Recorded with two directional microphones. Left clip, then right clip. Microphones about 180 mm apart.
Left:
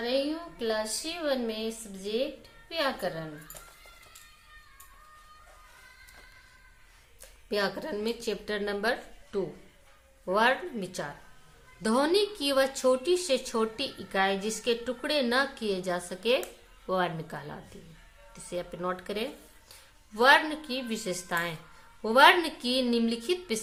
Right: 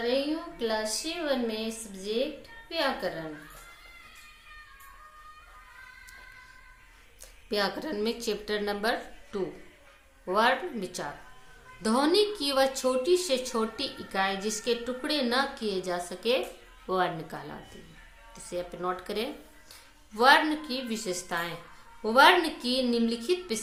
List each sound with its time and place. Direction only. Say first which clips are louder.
0.6 s speech: even; 30° left (ahead or behind)
7.5 s speech: right 1 dB; 20° left (ahead or behind)